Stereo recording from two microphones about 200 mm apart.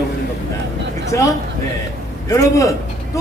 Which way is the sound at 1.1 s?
15° left (ahead or behind).